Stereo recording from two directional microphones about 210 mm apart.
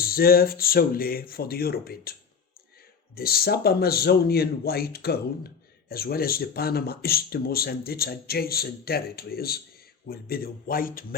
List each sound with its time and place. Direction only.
0.0 s speech: 45° left (ahead or behind)
3.2 s speech: 45° left (ahead or behind)